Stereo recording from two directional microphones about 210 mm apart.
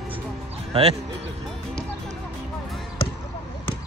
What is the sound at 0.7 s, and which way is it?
Speech, 30° right (ahead or behind).